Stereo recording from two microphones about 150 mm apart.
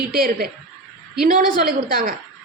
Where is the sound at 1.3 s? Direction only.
65° right (ahead or behind).